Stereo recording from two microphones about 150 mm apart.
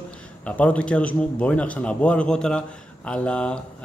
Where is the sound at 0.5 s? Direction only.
10° left (ahead or behind).